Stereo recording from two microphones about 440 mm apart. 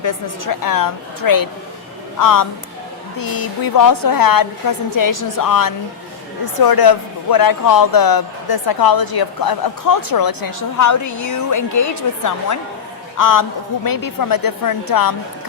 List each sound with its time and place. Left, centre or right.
0.0 s a man's voice: left